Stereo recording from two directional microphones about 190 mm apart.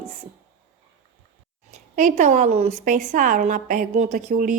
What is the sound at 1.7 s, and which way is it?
A woman's voice, 40° right (ahead or behind).